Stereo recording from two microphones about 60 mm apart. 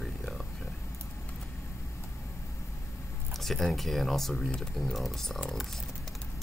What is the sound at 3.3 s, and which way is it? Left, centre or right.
Speech, centre.